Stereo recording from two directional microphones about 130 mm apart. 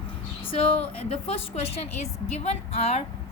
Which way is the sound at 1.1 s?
50° left (ahead or behind).